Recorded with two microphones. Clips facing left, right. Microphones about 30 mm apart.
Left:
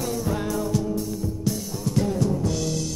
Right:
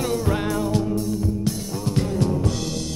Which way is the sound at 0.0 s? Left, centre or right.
Right.